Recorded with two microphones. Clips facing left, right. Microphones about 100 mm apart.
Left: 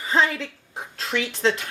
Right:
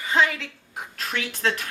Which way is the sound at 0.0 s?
35° left (ahead or behind).